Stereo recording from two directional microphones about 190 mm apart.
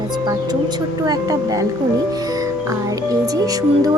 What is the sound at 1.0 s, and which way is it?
Speech, 20° right (ahead or behind).